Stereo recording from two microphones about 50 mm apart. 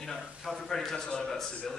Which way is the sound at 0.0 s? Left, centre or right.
Centre.